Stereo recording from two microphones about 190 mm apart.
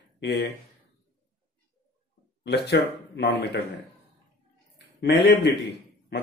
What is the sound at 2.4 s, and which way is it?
Speech, 60° left (ahead or behind).